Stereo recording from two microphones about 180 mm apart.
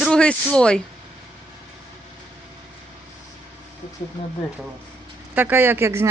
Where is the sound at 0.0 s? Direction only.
5° left (ahead or behind).